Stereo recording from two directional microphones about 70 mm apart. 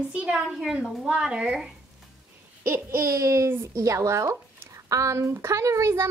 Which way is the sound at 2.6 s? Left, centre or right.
Right.